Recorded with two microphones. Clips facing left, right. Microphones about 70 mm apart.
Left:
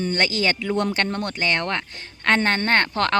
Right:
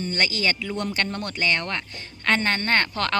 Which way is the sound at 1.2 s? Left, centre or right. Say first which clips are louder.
Left 2 dB; left.